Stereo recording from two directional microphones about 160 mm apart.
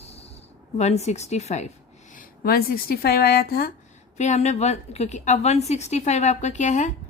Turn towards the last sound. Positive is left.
turn(degrees=50)  # may be behind; listen again after turning